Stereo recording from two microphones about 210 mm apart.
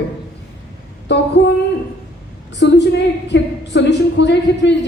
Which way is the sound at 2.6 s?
55° left (ahead or behind).